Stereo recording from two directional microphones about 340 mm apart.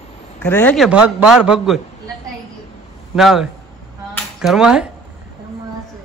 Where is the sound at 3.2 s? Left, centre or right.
Centre.